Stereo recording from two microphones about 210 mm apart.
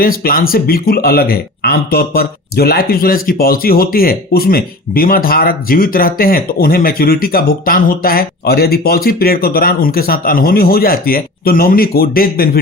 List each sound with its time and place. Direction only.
0.0 s speech: 45° left (ahead or behind)